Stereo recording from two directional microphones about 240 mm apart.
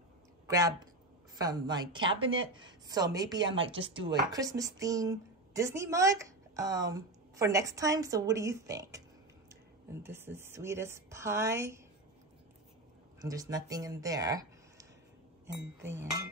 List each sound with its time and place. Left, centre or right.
0.5 s speech: centre
10.0 s speech: centre
13.2 s speech: centre